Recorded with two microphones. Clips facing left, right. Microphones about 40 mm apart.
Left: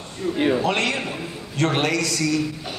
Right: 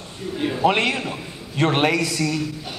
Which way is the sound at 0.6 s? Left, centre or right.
Centre.